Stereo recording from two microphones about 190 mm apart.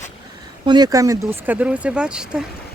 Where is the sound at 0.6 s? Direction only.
20° right (ahead or behind).